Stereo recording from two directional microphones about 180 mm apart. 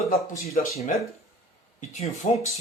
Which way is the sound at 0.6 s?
45° left (ahead or behind).